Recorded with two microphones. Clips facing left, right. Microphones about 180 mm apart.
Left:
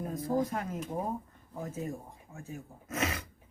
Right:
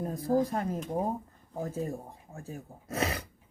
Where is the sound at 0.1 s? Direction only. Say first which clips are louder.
Right 3 dB; 35° right (ahead or behind).